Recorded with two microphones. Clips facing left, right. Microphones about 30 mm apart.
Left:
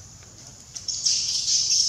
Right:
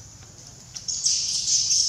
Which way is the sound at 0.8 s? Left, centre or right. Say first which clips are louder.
Left 1 dB; centre.